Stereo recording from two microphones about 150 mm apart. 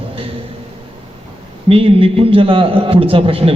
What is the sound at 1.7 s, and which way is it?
A woman's voice, 40° right (ahead or behind).